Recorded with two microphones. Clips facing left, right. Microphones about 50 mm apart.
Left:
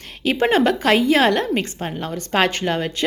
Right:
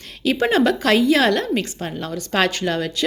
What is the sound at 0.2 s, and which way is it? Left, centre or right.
Speech, left.